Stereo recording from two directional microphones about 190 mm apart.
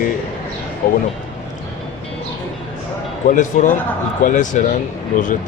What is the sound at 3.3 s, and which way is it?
Speech, 40° left (ahead or behind).